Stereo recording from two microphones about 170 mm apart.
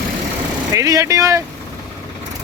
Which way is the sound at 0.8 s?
20° right (ahead or behind).